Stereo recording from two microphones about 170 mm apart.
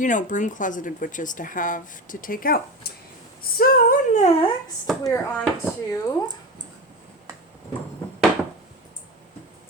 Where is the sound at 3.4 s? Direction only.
60° left (ahead or behind).